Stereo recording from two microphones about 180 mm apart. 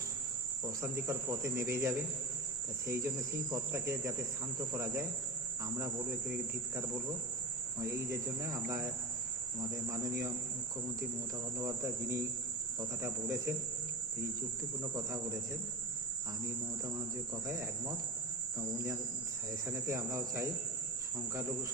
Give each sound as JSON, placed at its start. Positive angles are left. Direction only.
{"t": 0.6, "sound": "cricket", "side_deg": -15}
{"t": 7.8, "sound": "cricket", "side_deg": -15}
{"t": 11.6, "sound": "cricket", "side_deg": -15}
{"t": 14.9, "sound": "cricket", "side_deg": -20}
{"t": 17.3, "sound": "cricket", "side_deg": -20}
{"t": 19.6, "sound": "cricket", "side_deg": -15}